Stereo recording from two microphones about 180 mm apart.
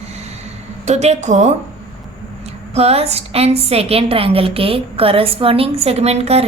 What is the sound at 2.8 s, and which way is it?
A woman's voice, 35° right (ahead or behind).